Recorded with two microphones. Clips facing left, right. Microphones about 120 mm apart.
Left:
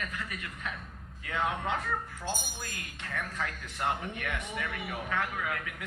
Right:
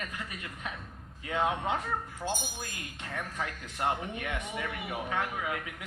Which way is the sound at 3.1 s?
20° right (ahead or behind).